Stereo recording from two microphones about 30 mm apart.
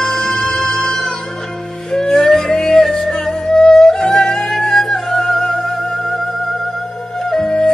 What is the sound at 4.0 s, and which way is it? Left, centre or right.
Music, left.